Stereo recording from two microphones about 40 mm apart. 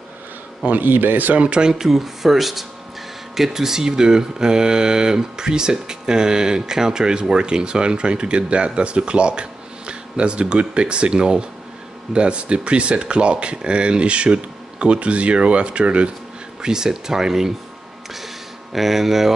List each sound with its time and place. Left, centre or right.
0.7 s a man's voice: right
1.4 s speech: right
1.7 s speech: centre; by 16.1 s right
16.6 s speech: centre
18.1 s a sound: centre